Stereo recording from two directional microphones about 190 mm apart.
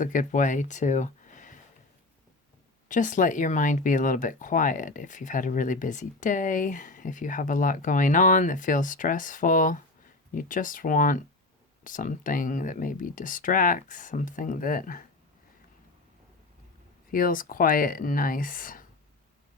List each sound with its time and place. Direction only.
0.0 s speech: 45° left (ahead or behind)
2.9 s speech: 40° left (ahead or behind)
17.1 s speech: 45° left (ahead or behind)